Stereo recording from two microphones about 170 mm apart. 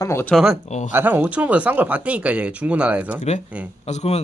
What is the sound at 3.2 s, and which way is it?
Speech, 40° left (ahead or behind).